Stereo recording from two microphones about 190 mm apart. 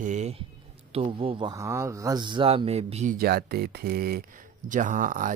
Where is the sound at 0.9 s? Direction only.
25° right (ahead or behind).